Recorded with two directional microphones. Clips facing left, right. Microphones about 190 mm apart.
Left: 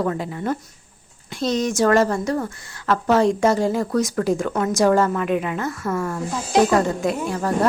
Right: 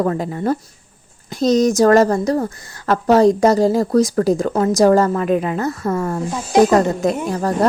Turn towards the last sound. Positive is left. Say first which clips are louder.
# right 4 dB
turn(degrees=-40)  # may be behind; listen again after turning